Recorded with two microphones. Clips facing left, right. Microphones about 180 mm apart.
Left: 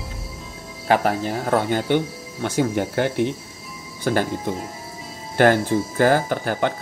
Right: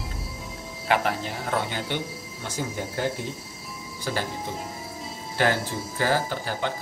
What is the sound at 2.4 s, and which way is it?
Speech, 70° left (ahead or behind).